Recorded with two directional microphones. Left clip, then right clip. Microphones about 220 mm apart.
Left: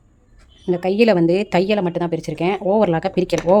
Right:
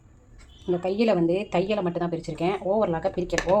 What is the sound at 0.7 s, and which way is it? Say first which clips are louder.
Speech: left 7 dB; 45° left (ahead or behind).